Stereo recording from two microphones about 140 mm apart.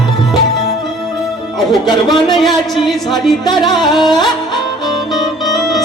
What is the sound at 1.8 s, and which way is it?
Speech, 30° left (ahead or behind).